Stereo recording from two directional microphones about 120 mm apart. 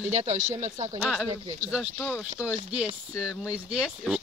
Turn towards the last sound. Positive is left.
turn(degrees=-5)  # may be behind; listen again after turning